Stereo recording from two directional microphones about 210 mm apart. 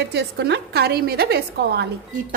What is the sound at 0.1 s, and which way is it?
A woman's voice, 50° right (ahead or behind).